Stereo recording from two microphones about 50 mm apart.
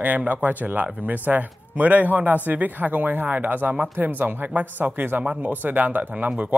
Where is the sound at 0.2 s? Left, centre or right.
Right.